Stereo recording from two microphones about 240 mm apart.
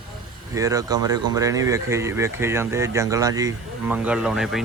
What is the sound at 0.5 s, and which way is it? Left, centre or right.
Speech, centre.